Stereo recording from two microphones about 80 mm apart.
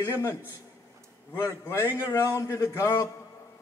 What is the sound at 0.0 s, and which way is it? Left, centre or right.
Speech, left.